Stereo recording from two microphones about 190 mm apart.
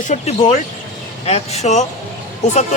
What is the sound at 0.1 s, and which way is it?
Speech, 35° left (ahead or behind).